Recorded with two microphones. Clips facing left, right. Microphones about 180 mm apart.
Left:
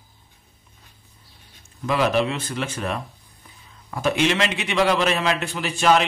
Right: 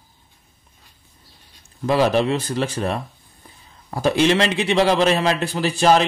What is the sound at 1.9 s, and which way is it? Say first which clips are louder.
A man's voice: right 3 dB; 35° right (ahead or behind).